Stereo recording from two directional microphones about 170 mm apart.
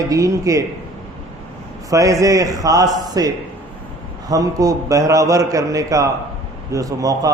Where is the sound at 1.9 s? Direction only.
20° right (ahead or behind).